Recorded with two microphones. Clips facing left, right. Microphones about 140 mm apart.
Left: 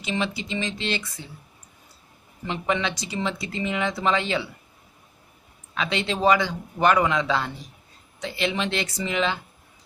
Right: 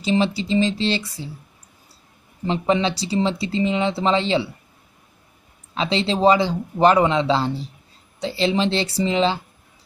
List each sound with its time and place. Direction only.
0.0 s speech: 30° right (ahead or behind)
2.4 s speech: 30° right (ahead or behind)
5.8 s speech: 30° right (ahead or behind)